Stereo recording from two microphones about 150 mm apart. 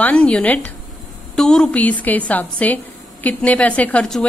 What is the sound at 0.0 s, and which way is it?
A woman's voice, 5° left (ahead or behind).